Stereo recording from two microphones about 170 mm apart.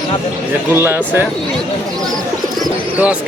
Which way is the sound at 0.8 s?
10° right (ahead or behind).